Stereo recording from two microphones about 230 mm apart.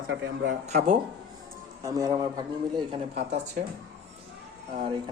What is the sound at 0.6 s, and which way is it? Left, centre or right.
Speech, right.